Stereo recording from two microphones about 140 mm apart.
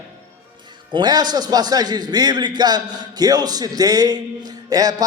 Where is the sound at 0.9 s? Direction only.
30° right (ahead or behind).